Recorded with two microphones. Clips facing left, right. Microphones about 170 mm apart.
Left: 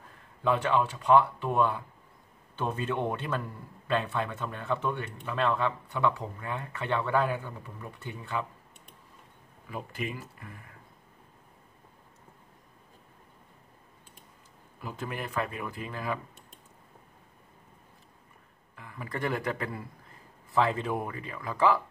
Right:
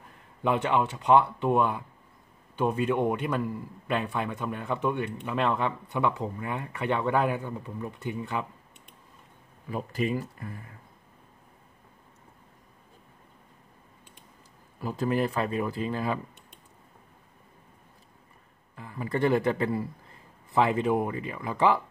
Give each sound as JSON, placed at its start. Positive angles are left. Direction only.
{"t": 0.4, "sound": "a man's voice", "side_deg": -20}
{"t": 9.7, "sound": "speech", "side_deg": -35}
{"t": 14.8, "sound": "speech", "side_deg": -35}
{"t": 18.8, "sound": "speech", "side_deg": -30}